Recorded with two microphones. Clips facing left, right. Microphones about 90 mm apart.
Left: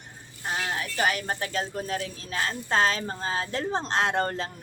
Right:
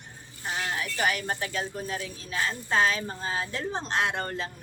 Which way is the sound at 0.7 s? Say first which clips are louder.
Left 1 dB; 35° left (ahead or behind).